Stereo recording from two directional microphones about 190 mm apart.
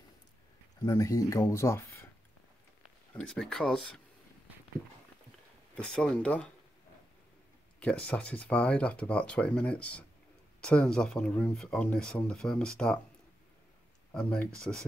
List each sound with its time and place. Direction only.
0.8 s speech: 15° left (ahead or behind)
3.2 s speech: 5° left (ahead or behind)
5.8 s speech: 5° left (ahead or behind)
7.8 s speech: 5° left (ahead or behind)
14.1 s speech: 5° left (ahead or behind)